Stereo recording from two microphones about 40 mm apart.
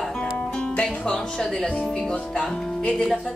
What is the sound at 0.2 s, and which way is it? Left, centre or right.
Music, left.